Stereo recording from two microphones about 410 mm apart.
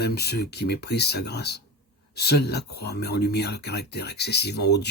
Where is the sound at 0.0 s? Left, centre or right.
Left.